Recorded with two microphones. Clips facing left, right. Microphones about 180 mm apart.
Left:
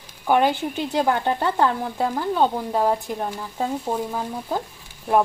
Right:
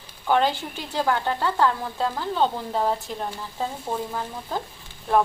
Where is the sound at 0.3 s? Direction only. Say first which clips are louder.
Left 3 dB; 15° left (ahead or behind).